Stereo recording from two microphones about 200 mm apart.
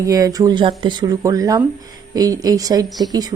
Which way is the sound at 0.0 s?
15° right (ahead or behind).